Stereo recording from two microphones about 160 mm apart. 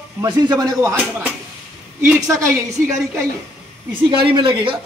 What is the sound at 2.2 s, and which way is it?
Speech, 20° right (ahead or behind).